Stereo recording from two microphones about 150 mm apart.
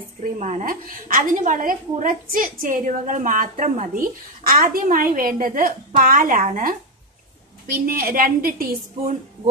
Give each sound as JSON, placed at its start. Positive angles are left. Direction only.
{"t": 0.2, "sound": "speech", "side_deg": -50}
{"t": 0.8, "sound": "a woman's voice", "side_deg": -70}